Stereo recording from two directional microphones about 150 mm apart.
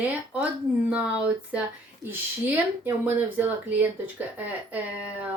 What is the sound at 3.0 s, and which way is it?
Speech, 10° right (ahead or behind).